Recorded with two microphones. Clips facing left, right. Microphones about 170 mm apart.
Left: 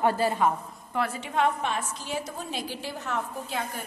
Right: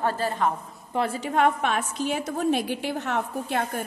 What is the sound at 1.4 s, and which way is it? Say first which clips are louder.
A woman's voice: right 3 dB; 65° right (ahead or behind).